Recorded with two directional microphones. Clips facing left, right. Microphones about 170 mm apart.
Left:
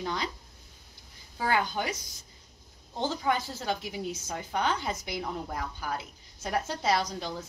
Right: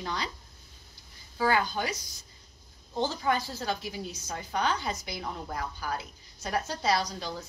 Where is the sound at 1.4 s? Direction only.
20° left (ahead or behind).